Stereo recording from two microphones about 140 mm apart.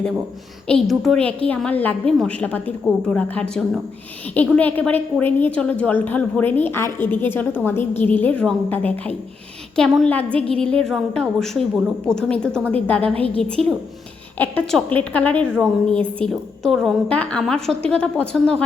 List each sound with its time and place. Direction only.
0.7 s a woman's voice: centre (ahead or behind)